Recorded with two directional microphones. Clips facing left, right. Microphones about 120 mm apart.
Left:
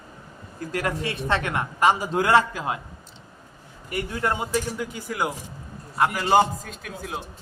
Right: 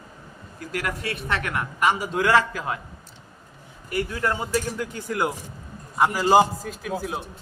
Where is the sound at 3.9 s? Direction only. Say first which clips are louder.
Right 1 dB; 25° left (ahead or behind).